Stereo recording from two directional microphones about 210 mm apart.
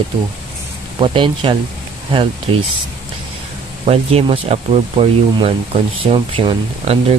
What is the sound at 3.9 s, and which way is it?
Speech, 30° right (ahead or behind).